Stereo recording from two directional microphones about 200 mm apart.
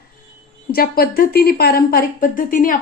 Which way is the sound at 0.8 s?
50° left (ahead or behind).